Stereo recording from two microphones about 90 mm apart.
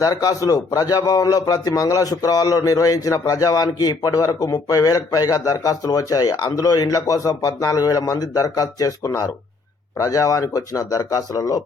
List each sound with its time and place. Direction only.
0.0 s a man's voice: 40° left (ahead or behind)